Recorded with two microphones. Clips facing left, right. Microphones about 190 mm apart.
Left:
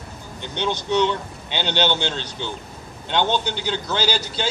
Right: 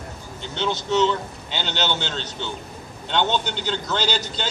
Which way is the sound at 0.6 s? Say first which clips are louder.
Even; 15° left (ahead or behind).